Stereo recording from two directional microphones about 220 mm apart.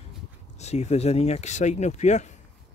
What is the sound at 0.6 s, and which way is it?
Speech, 30° left (ahead or behind).